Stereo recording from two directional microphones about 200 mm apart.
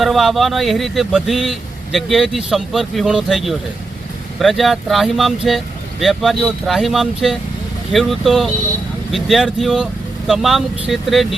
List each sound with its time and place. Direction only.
0.0 s speech: centre (ahead or behind)